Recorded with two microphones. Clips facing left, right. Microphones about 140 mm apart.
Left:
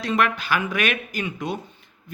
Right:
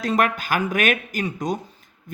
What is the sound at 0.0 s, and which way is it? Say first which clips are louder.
Speech: right 1 dB; 45° right (ahead or behind).